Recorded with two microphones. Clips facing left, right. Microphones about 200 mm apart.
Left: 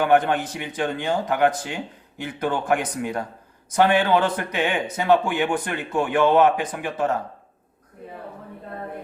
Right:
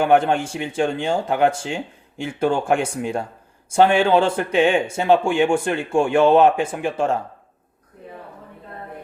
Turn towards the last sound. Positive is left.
turn(degrees=-30)  # may be behind; listen again after turning